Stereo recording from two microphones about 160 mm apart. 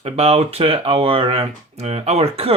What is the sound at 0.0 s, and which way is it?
Speech, 40° right (ahead or behind).